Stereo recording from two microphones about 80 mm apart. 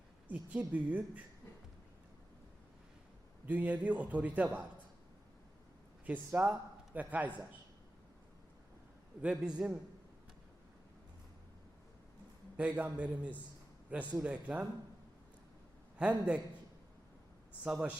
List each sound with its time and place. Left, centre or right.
0.3 s a man's voice: centre
3.4 s a man's voice: centre
6.1 s a man's voice: right
9.2 s a man's voice: centre
12.5 s a man's voice: centre
16.0 s a man's voice: centre
17.6 s a man's voice: centre